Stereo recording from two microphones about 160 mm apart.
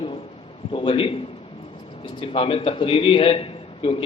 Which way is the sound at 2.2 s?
35° left (ahead or behind).